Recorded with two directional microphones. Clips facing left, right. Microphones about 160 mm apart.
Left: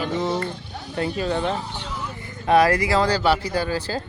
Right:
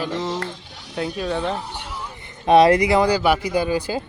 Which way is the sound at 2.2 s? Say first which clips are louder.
Right 4 dB; 20° right (ahead or behind).